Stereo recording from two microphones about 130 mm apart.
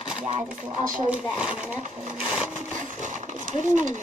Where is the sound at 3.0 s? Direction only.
70° right (ahead or behind).